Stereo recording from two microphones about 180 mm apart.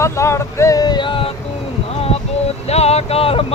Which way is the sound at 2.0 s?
35° left (ahead or behind).